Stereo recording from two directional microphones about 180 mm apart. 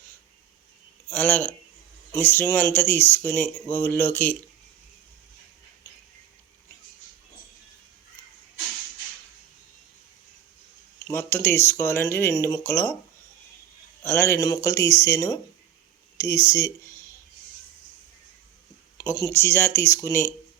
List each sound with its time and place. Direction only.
1.1 s speech: 10° left (ahead or behind)
11.0 s speech: 10° left (ahead or behind)
14.0 s speech: 15° left (ahead or behind)
18.9 s speech: 15° left (ahead or behind)